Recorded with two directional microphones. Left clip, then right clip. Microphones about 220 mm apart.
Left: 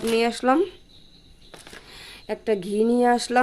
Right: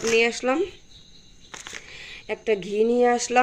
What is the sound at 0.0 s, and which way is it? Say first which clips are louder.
Speech: right 1 dB; 15° left (ahead or behind).